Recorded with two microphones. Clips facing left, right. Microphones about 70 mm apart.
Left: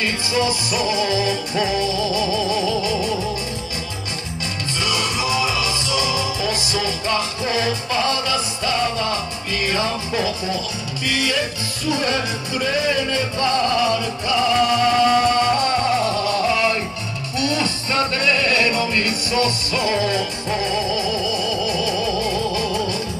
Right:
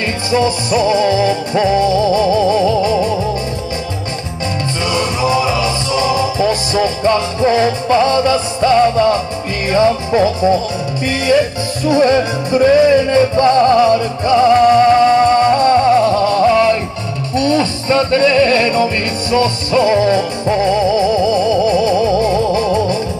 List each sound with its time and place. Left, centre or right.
0.3 s music: right
4.8 s music: right